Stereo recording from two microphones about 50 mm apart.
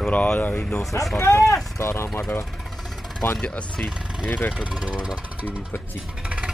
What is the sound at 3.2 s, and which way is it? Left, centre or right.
Speech, left.